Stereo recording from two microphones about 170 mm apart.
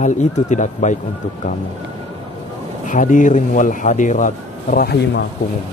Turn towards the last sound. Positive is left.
turn(degrees=65)  # may be behind; listen again after turning